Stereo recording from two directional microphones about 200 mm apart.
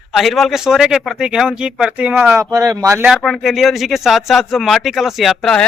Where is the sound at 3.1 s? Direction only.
Centre (ahead or behind).